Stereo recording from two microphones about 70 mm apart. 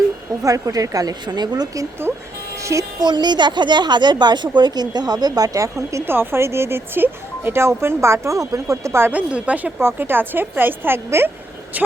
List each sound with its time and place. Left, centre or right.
0.4 s a woman's voice: right
2.6 s music: right
3.0 s a woman's voice: right
6.1 s speech: right
9.1 s speech: right
9.8 s speech: right
11.7 s a sound: right